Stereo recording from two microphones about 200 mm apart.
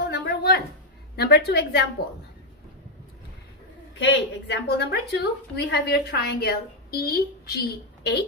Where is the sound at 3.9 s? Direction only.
65° left (ahead or behind).